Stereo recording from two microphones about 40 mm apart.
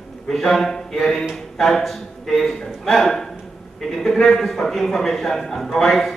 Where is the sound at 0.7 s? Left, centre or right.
Centre.